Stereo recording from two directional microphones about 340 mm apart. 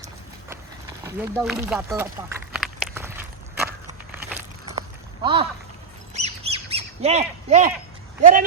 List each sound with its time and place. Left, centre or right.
1.0 s a sound: centre
5.2 s speech: centre
6.1 s squawk: centre
8.2 s speech: right